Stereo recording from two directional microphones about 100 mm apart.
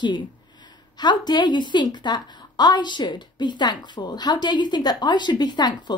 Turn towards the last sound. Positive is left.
turn(degrees=45)  # may be behind; listen again after turning